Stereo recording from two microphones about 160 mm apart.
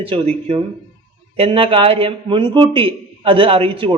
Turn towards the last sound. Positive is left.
turn(degrees=-35)  # may be behind; listen again after turning